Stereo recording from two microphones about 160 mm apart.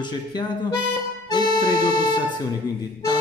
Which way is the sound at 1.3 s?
25° left (ahead or behind).